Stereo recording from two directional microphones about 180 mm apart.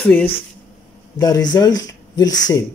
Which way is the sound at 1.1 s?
20° left (ahead or behind).